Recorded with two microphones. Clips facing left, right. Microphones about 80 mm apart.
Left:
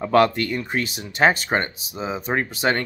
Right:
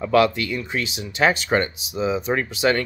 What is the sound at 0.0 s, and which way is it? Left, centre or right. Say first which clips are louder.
Speech: left 1 dB; left.